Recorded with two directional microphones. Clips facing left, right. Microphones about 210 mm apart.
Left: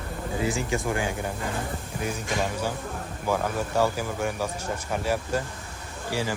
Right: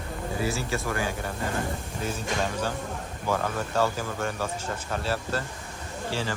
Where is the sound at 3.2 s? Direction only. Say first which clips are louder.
Left 2 dB; 10° left (ahead or behind).